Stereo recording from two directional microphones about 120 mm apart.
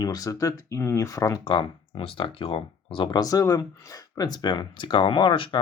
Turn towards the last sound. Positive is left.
turn(degrees=45)  # may be behind; listen again after turning